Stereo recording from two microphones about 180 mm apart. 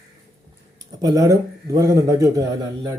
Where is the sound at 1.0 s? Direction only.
20° right (ahead or behind).